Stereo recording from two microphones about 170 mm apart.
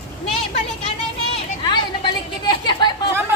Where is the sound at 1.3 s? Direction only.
30° left (ahead or behind).